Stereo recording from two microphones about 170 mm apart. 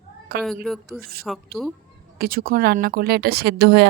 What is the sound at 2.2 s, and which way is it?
Speech, 60° right (ahead or behind).